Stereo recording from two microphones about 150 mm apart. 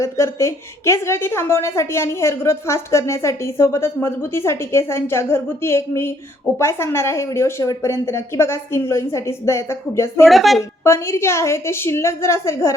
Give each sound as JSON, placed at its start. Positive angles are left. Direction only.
{"t": 0.0, "sound": "a woman's voice", "side_deg": 20}
{"t": 10.2, "sound": "a woman's voice", "side_deg": 0}
{"t": 10.8, "sound": "a woman's voice", "side_deg": 20}